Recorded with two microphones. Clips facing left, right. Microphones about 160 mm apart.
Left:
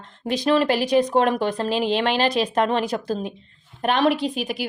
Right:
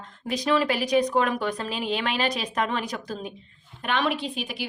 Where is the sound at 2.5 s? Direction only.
30° left (ahead or behind).